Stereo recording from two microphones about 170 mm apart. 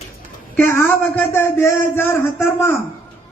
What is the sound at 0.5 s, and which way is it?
A man's voice, 10° left (ahead or behind).